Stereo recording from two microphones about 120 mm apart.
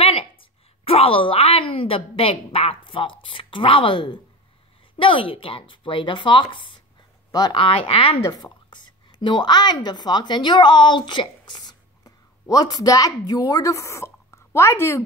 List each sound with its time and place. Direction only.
0.0 s a woman's voice: 50° left (ahead or behind)
7.2 s speech: 35° left (ahead or behind)
7.5 s speech: 50° left (ahead or behind)
8.3 s a woman's voice: 35° left (ahead or behind)